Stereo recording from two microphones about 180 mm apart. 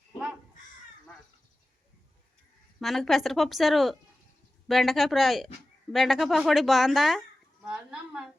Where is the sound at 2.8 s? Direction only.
Centre (ahead or behind).